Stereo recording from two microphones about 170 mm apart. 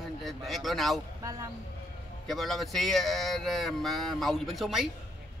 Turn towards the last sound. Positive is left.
turn(degrees=0)  # may be behind; listen again after turning